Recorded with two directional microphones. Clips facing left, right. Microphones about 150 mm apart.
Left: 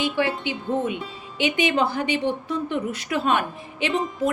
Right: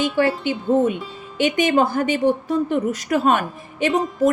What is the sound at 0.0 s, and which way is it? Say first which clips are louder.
A woman's voice: right 4 dB; 45° right (ahead or behind).